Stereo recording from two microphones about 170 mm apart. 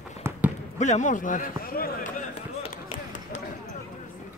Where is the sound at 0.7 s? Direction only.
45° left (ahead or behind); by 1.9 s 60° left (ahead or behind).